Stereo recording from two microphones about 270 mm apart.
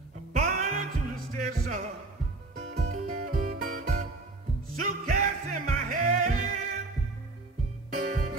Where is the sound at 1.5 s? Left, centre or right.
Right.